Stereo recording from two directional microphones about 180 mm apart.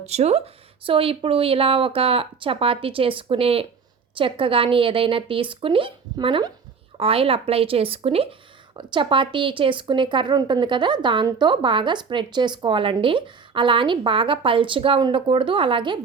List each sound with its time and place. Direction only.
0.0 s a woman's voice: 35° right (ahead or behind)